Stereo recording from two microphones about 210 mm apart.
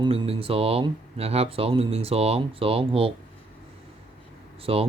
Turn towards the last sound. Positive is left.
turn(degrees=-25)  # may be behind; listen again after turning